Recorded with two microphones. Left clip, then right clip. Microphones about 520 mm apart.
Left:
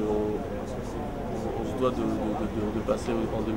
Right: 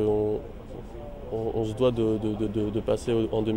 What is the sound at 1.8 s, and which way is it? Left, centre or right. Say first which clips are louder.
Speech: right 3 dB; right.